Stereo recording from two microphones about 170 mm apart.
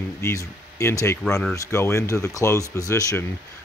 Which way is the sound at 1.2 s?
5° left (ahead or behind).